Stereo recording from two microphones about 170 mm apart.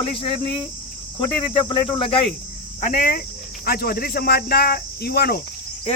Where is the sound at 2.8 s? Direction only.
50° left (ahead or behind).